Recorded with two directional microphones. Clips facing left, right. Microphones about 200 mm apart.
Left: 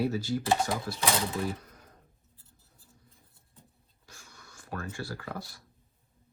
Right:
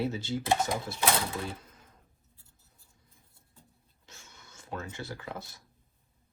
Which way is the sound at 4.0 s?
25° right (ahead or behind).